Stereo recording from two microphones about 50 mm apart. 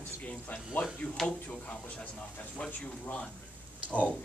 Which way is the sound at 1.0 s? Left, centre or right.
Left.